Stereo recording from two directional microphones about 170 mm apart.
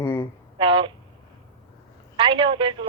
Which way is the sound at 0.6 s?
30° right (ahead or behind).